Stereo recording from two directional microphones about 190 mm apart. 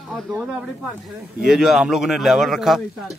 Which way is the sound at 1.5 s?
Centre (ahead or behind).